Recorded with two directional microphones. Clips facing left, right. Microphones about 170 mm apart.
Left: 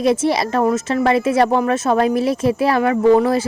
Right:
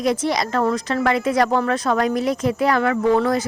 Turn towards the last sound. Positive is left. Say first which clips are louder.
# left 4 dB
turn(degrees=25)  # may be behind; listen again after turning